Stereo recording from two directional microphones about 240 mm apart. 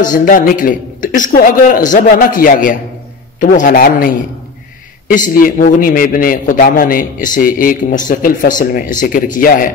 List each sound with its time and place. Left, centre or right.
0.0 s a man's voice: left
5.1 s a man's voice: left